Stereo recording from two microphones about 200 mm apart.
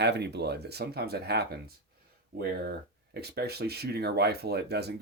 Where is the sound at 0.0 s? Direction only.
55° right (ahead or behind).